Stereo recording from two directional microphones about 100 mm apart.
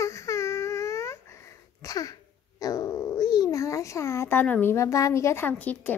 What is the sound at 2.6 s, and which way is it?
Speech, 35° left (ahead or behind).